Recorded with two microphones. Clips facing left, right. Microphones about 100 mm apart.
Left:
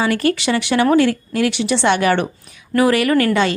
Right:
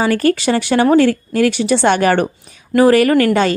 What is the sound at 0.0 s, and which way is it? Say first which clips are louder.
A woman's voice: right 3 dB; 40° right (ahead or behind).